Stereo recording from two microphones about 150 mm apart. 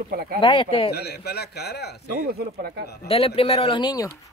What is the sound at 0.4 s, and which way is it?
Speech, 35° left (ahead or behind).